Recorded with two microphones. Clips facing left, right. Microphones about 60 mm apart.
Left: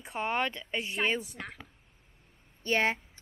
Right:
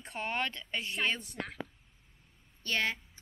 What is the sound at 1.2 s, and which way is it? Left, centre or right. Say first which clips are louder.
Speech: right 2 dB; centre.